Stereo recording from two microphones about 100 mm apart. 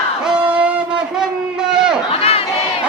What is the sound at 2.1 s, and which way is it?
Crowd, 75° left (ahead or behind).